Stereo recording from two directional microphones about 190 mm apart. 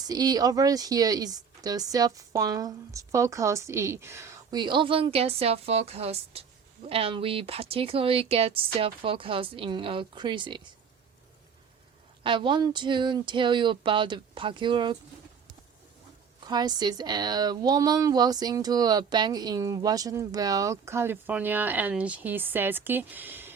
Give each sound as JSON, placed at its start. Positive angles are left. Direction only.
{"t": 0.0, "sound": "speech", "side_deg": -20}
{"t": 12.2, "sound": "speech", "side_deg": -25}
{"t": 16.4, "sound": "speech", "side_deg": -20}